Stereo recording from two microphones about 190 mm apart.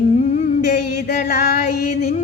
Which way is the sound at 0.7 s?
50° left (ahead or behind).